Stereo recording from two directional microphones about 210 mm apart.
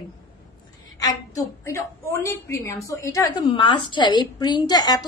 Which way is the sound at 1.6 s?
15° left (ahead or behind).